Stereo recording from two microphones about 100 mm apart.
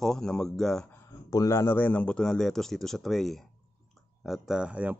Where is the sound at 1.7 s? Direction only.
15° left (ahead or behind).